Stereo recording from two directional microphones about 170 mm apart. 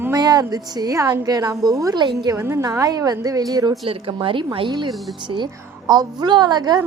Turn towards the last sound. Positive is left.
turn(degrees=-25)  # may be behind; listen again after turning